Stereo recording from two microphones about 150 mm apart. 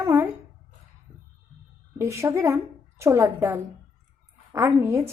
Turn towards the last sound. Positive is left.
turn(degrees=-15)  # may be behind; listen again after turning